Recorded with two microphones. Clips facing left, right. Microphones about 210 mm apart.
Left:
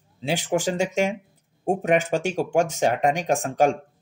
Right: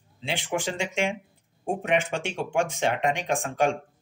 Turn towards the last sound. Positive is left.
turn(degrees=40)  # may be behind; listen again after turning